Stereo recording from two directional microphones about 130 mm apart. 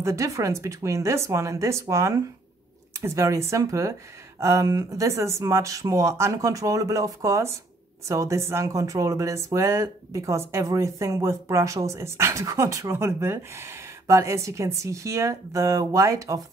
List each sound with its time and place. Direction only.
0.0 s speech: 25° right (ahead or behind)